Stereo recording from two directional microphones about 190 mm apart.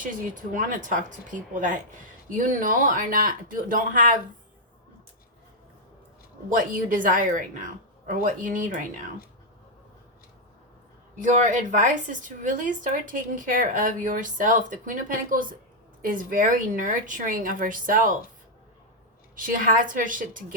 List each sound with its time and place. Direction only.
0.5 s speech: 45° right (ahead or behind)
6.5 s speech: 45° right (ahead or behind)
11.2 s speech: 40° right (ahead or behind)
19.4 s speech: 45° right (ahead or behind)